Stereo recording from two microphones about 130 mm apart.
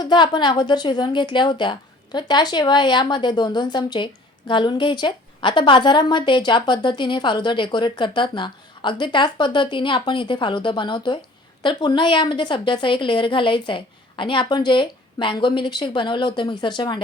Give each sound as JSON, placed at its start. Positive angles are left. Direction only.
{"t": 0.0, "sound": "a woman's voice", "side_deg": 35}